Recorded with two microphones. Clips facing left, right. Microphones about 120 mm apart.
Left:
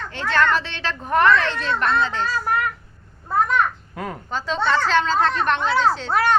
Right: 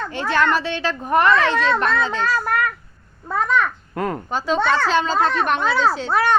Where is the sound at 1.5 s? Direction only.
80° right.